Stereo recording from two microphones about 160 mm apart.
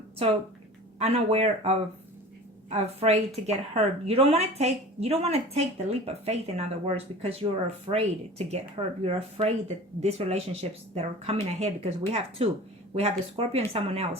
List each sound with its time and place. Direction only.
0.9 s speech: 40° right (ahead or behind)